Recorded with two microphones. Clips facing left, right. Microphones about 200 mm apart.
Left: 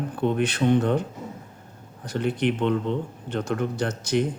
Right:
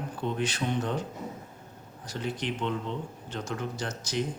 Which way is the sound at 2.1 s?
60° left (ahead or behind).